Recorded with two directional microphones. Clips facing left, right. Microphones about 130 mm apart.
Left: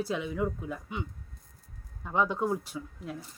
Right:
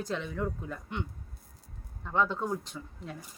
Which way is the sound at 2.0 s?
15° left (ahead or behind).